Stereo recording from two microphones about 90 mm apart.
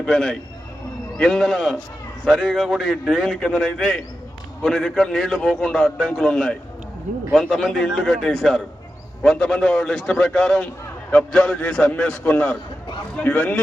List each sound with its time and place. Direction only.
0.0 s a man's voice: 5° left (ahead or behind)